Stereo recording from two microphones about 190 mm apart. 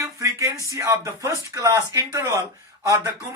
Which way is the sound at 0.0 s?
15° right (ahead or behind).